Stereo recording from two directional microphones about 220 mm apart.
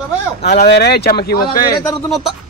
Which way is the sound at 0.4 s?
50° left (ahead or behind).